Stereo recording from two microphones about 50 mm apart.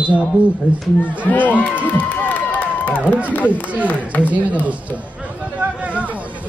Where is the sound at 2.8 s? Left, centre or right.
Left.